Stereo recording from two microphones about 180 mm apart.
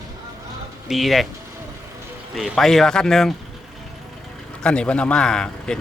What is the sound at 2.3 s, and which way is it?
Speech, centre (ahead or behind).